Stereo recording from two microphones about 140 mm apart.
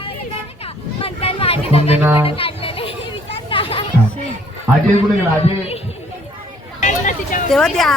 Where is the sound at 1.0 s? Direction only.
45° left (ahead or behind).